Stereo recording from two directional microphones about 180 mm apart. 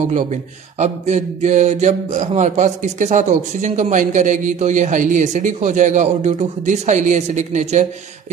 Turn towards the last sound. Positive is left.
turn(degrees=-40)  # may be behind; listen again after turning